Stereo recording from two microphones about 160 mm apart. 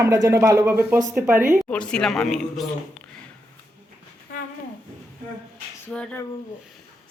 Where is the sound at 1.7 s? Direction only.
5° left (ahead or behind).